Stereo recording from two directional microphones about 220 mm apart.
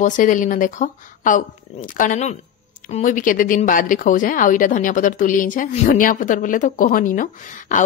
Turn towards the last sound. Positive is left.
turn(degrees=35)  # may be behind; listen again after turning